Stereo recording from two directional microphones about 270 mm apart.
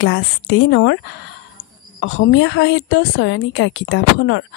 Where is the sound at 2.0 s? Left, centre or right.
Left.